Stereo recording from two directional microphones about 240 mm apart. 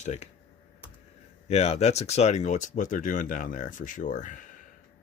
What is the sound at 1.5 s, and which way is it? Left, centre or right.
Speech, left.